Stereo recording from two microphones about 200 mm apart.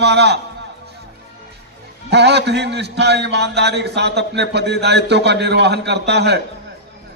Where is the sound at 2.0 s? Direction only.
55° right (ahead or behind).